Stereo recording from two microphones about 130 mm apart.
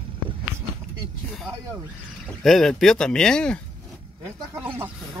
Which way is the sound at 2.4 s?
5° left (ahead or behind).